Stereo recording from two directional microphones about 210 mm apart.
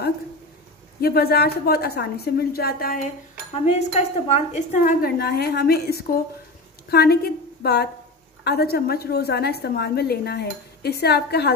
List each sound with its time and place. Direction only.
1.0 s a woman's voice: 50° left (ahead or behind)
3.6 s a woman's voice: 30° left (ahead or behind)
5.0 s a woman's voice: 50° left (ahead or behind)